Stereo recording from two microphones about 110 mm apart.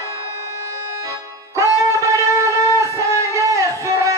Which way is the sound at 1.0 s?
25° right (ahead or behind).